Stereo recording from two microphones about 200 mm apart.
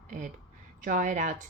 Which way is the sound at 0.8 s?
40° right (ahead or behind).